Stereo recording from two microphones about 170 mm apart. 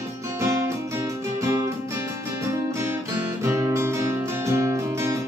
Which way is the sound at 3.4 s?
15° right (ahead or behind).